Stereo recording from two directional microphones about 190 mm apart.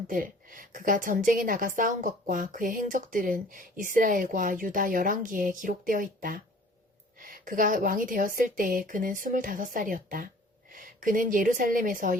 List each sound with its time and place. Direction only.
0.1 s a woman's voice: 45° right (ahead or behind)